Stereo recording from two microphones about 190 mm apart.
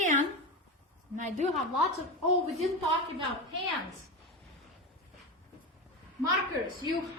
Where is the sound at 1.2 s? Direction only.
40° right (ahead or behind).